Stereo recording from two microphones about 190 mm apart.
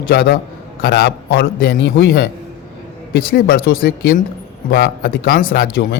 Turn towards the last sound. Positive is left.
turn(degrees=50)  # may be behind; listen again after turning